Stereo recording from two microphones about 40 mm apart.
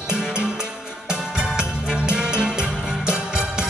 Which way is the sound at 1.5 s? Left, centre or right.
Right.